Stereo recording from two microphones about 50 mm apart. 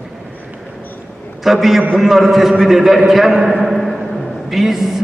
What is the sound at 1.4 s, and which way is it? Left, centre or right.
A man's voice, centre.